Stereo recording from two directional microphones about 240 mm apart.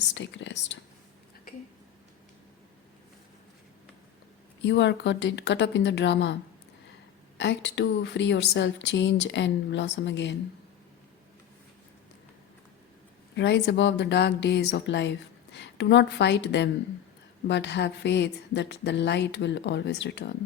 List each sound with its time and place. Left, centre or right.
0.1 s speech: left
4.6 s speech: left
7.3 s speech: left
13.3 s speech: left